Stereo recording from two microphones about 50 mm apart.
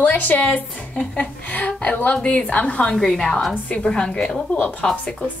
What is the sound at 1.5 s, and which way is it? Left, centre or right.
A woman's voice, left.